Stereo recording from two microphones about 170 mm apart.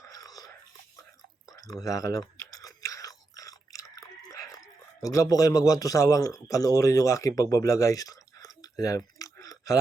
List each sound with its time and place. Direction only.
0.0 s whispering: 20° left (ahead or behind)
1.5 s chewing: 20° left (ahead or behind)
4.5 s speech: 20° left (ahead or behind)
8.8 s a sound: 20° left (ahead or behind)